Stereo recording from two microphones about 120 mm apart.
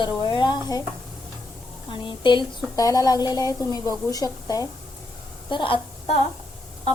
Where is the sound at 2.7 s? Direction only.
30° left (ahead or behind).